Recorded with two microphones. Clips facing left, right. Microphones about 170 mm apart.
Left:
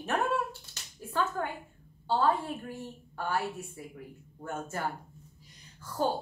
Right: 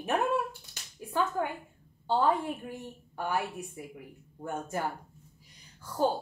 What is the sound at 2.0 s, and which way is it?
A woman's voice, 15° right (ahead or behind).